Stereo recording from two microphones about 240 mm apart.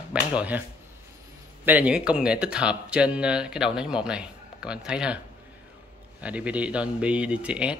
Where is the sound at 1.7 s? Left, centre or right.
Centre.